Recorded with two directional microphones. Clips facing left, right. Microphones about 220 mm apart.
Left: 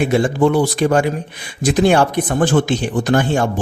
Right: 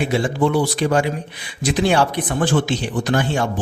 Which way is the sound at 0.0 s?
50° left (ahead or behind).